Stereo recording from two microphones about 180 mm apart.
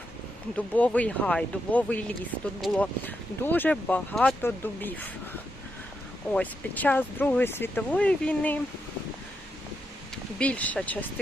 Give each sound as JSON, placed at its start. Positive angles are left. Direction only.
{"t": 0.5, "sound": "speech", "side_deg": 10}
{"t": 6.3, "sound": "speech", "side_deg": 10}
{"t": 10.3, "sound": "speech", "side_deg": 5}